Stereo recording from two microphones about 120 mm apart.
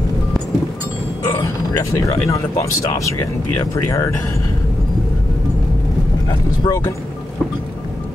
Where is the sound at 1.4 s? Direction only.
30° left (ahead or behind).